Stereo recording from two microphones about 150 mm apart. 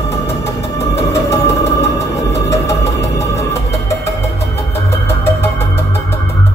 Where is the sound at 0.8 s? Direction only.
20° left (ahead or behind).